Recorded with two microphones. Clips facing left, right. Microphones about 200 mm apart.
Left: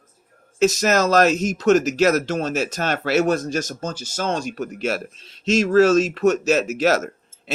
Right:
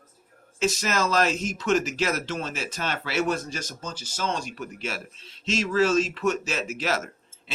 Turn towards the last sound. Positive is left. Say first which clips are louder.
# left 9 dB
turn(degrees=45)  # may be behind; listen again after turning